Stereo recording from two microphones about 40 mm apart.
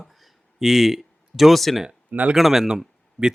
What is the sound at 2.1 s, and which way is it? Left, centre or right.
Speech, right.